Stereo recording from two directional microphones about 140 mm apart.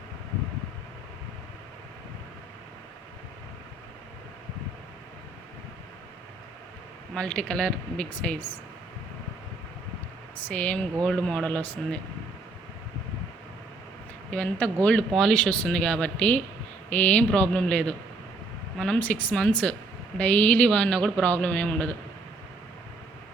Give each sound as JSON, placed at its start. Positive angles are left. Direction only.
{"t": 7.1, "sound": "speech", "side_deg": 10}
{"t": 10.4, "sound": "speech", "side_deg": 10}
{"t": 14.3, "sound": "speech", "side_deg": 10}